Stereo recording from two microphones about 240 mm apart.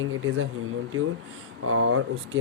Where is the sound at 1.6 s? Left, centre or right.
Right.